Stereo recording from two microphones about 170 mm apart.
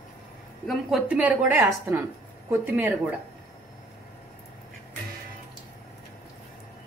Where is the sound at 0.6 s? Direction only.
5° right (ahead or behind).